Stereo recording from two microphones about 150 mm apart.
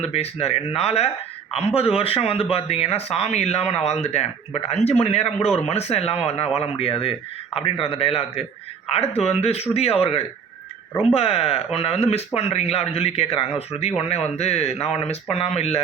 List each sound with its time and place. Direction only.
0.0 s speech: 45° left (ahead or behind)